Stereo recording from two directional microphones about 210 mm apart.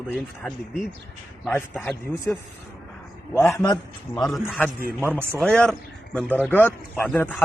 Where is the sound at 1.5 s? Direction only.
10° left (ahead or behind).